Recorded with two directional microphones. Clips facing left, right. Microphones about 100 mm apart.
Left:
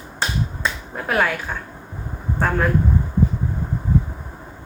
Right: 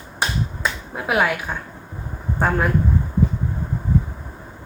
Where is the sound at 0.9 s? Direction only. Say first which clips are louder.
Right 1 dB; 10° right (ahead or behind).